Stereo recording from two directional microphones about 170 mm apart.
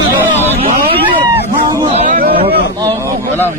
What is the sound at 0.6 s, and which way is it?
Speech, 30° right (ahead or behind).